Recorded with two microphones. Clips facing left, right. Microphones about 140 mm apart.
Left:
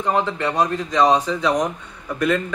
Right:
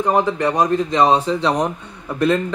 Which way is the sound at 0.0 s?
15° right (ahead or behind).